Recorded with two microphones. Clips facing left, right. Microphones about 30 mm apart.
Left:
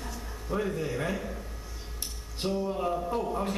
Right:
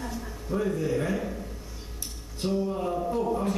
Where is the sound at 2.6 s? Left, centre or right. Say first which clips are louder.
Right 1 dB; centre.